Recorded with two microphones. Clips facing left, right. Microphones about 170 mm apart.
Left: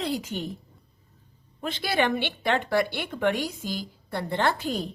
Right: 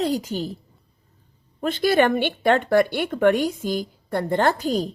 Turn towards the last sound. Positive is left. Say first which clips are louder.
# right 5 dB
turn(degrees=-40)  # may be behind; listen again after turning